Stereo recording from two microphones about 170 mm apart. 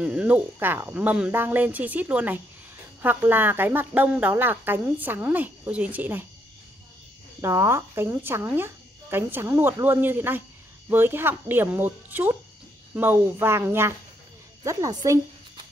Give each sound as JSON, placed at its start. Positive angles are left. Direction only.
{"t": 0.0, "sound": "speech", "side_deg": -5}
{"t": 7.4, "sound": "a woman's voice", "side_deg": -15}